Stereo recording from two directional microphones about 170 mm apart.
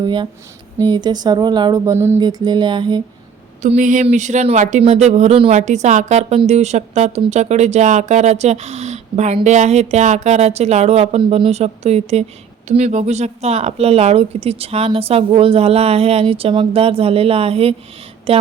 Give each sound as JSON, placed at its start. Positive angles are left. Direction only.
{"t": 0.0, "sound": "speech", "side_deg": -30}
{"t": 3.6, "sound": "speech", "side_deg": -45}